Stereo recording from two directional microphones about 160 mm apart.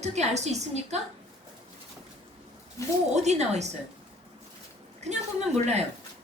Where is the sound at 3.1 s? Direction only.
45° right (ahead or behind).